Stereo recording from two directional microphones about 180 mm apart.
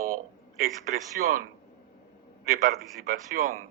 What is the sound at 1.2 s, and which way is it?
Speech, 50° right (ahead or behind).